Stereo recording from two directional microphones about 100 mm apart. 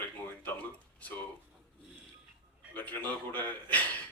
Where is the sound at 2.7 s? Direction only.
15° left (ahead or behind).